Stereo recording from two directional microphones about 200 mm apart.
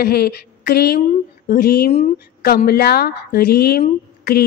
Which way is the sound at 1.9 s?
35° left (ahead or behind).